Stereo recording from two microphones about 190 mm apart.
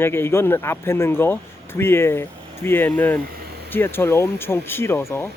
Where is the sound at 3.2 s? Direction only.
55° right (ahead or behind).